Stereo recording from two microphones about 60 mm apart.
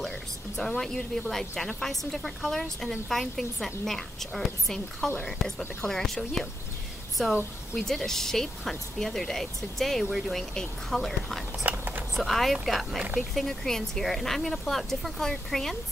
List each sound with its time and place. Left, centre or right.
0.6 s a woman's voice: centre
11.6 s a sound: right
12.2 s a woman's voice: centre